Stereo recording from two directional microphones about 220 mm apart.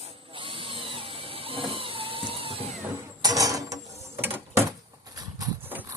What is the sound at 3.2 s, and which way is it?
Mechanisms, 15° right (ahead or behind).